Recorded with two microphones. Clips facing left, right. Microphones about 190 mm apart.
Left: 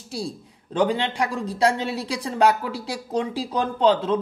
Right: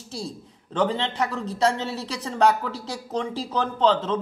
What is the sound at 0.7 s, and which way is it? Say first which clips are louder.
Speech: left 2 dB; 10° left (ahead or behind).